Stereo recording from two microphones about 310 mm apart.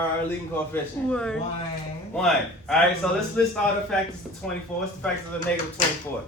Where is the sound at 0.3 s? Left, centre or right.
Centre.